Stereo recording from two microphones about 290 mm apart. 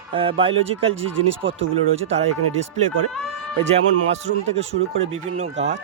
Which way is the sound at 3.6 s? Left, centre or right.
Right.